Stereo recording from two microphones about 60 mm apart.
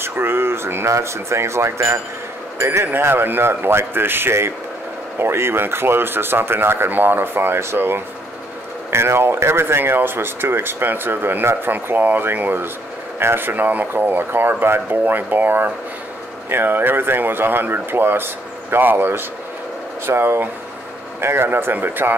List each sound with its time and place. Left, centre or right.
0.0 s speech: right
2.9 s speech: right